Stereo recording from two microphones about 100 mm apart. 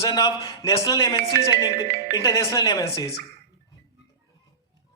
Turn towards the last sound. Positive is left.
turn(degrees=35)  # may be behind; listen again after turning